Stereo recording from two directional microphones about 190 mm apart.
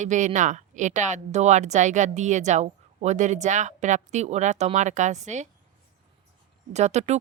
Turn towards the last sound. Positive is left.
turn(degrees=-35)  # may be behind; listen again after turning